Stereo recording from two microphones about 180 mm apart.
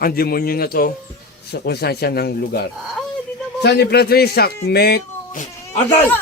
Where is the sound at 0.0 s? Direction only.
60° left (ahead or behind).